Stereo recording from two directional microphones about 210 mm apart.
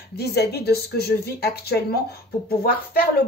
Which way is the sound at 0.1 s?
50° left (ahead or behind).